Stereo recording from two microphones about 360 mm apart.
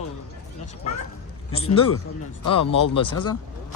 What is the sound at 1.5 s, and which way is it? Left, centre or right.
Speech, centre.